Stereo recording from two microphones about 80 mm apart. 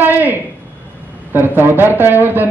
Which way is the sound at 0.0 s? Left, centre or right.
Right.